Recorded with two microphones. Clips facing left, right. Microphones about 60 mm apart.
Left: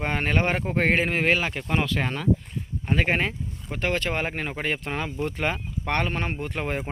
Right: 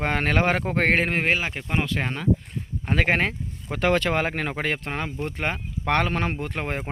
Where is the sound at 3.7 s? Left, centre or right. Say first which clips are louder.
Right 5 dB; right.